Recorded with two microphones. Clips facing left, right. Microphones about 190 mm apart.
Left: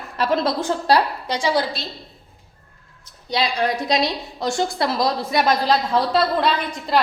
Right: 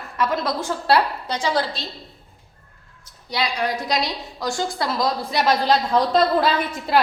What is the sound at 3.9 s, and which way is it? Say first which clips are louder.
A woman's voice: left 3 dB; 25° left (ahead or behind).